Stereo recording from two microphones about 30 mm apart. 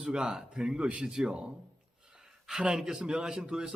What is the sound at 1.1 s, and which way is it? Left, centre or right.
Speech, right.